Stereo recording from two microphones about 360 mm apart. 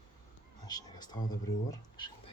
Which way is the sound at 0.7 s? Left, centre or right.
Centre.